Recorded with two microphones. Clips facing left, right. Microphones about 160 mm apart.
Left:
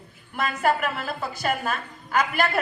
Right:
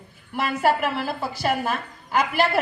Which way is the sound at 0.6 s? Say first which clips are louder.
Right 2 dB; 35° right (ahead or behind).